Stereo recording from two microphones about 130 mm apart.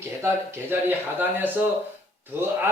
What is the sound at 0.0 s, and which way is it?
Speech, 20° right (ahead or behind).